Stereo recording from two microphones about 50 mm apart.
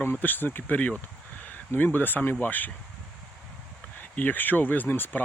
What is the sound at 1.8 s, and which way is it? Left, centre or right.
Speech, left.